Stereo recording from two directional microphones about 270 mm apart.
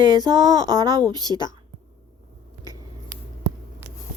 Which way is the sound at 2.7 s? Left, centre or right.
Centre.